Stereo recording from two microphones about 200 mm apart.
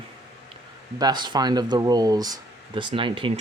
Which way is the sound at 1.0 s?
20° right (ahead or behind).